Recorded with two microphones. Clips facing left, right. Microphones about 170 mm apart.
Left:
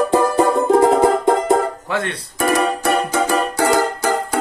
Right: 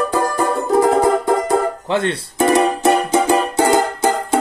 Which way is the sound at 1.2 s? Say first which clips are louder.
Left 1 dB; 20° left (ahead or behind).